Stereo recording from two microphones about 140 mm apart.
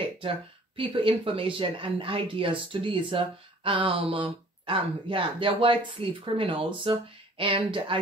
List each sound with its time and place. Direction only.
0.7 s speech: 40° right (ahead or behind)